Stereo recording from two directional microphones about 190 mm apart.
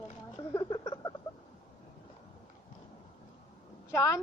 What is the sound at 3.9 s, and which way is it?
Speech, 15° left (ahead or behind).